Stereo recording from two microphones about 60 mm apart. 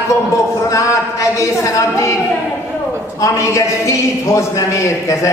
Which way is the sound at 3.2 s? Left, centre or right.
Left.